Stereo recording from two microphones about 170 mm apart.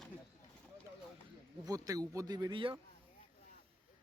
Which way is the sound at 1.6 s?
20° right (ahead or behind).